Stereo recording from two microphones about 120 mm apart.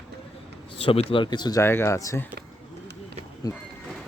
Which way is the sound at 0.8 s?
50° left (ahead or behind).